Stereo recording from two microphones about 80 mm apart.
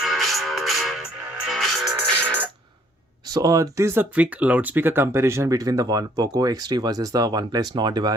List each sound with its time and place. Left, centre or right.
0.0 s music: centre
2.1 s music: right
3.2 s speech: right